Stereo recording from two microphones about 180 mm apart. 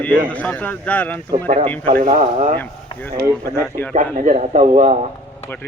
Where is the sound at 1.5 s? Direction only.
40° right (ahead or behind).